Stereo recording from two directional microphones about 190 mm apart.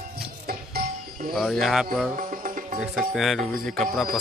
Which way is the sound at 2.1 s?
45° right (ahead or behind).